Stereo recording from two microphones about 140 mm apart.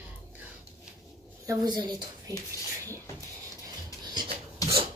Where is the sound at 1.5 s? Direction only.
30° right (ahead or behind).